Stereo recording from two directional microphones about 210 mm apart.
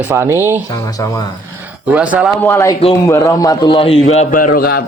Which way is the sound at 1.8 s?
5° right (ahead or behind).